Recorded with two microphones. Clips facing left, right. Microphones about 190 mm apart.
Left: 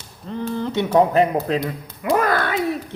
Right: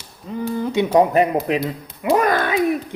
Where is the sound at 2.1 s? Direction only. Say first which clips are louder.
Right 2 dB; 15° right (ahead or behind).